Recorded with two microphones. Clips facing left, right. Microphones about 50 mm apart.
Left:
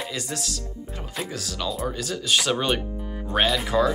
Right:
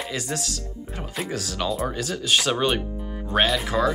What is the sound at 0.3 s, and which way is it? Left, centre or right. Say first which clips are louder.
Speech: right 3 dB; right.